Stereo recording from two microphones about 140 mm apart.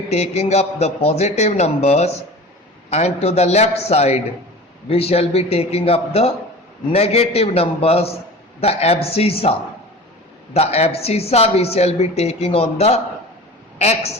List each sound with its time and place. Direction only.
0.1 s a woman's voice: 50° left (ahead or behind)